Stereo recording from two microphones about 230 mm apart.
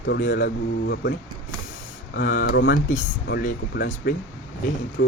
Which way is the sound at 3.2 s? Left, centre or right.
Left.